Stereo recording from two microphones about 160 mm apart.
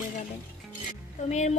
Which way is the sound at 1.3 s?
45° left (ahead or behind).